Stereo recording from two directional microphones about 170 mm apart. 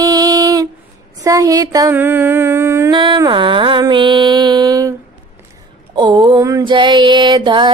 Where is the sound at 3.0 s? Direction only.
25° right (ahead or behind).